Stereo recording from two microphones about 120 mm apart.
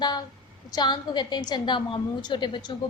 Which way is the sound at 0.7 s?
35° left (ahead or behind).